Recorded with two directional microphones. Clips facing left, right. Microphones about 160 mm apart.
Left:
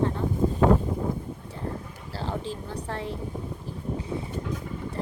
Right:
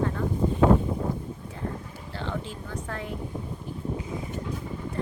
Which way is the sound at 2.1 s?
35° left (ahead or behind).